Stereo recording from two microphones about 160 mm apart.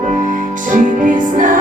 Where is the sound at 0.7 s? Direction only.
55° right (ahead or behind).